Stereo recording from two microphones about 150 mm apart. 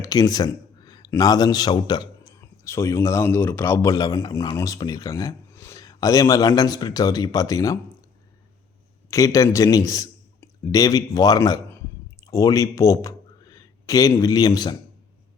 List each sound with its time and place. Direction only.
0.0 s speech: 25° left (ahead or behind)
9.0 s a man's voice: 20° left (ahead or behind)